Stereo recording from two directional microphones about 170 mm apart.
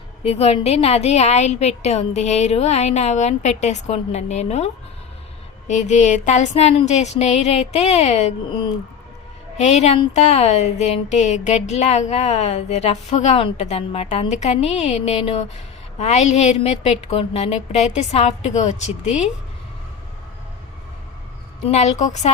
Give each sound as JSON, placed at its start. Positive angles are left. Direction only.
{"t": 0.2, "sound": "speech", "side_deg": 35}
{"t": 9.6, "sound": "speech", "side_deg": 40}
{"t": 21.7, "sound": "speech", "side_deg": 40}